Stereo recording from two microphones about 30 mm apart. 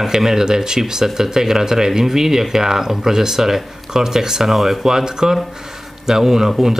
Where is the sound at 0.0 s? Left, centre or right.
Centre.